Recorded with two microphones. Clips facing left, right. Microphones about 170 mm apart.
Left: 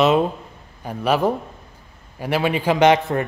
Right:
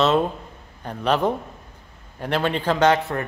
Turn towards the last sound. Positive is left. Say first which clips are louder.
# left 3 dB
turn(degrees=20)  # may be behind; listen again after turning